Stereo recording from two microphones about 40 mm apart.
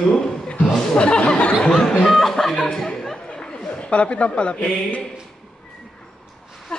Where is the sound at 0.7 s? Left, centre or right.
Left.